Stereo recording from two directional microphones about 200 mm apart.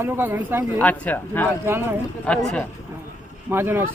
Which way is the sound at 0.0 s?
10° right (ahead or behind).